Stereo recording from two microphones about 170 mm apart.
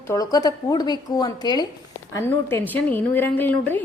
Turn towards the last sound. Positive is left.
turn(degrees=10)  # may be behind; listen again after turning